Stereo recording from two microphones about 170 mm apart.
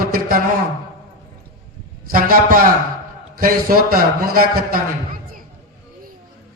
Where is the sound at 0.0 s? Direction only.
60° right (ahead or behind).